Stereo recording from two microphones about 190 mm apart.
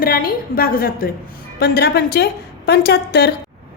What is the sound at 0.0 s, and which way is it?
A woman's voice, 50° left (ahead or behind).